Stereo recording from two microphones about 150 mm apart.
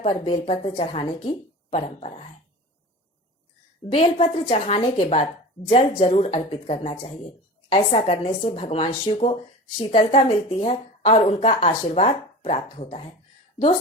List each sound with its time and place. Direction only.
0.0 s speech: 35° left (ahead or behind)
3.9 s speech: 40° left (ahead or behind)